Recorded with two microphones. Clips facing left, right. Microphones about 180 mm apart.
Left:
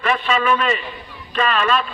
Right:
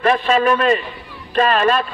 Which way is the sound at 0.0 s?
40° right (ahead or behind).